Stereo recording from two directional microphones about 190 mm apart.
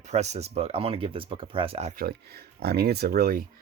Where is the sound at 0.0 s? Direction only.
35° right (ahead or behind).